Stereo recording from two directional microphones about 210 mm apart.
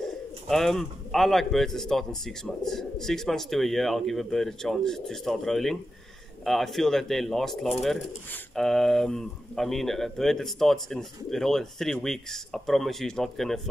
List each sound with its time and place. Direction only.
0.0 s speech: centre (ahead or behind)